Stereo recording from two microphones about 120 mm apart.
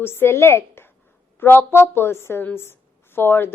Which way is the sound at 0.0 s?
20° left (ahead or behind).